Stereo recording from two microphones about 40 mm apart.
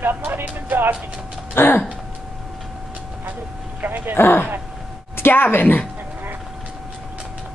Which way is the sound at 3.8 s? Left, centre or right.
Right.